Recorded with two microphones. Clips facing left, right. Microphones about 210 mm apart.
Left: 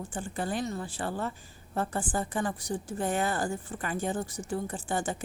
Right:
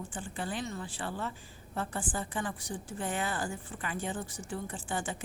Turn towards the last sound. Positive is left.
turn(degrees=45)  # may be behind; listen again after turning